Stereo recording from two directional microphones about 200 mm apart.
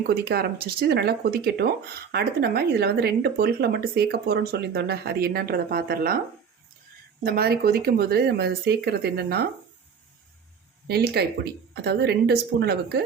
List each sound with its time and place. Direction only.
0.1 s speech: 50° right (ahead or behind)
7.3 s speech: 50° right (ahead or behind)
10.8 s a woman's voice: 55° right (ahead or behind)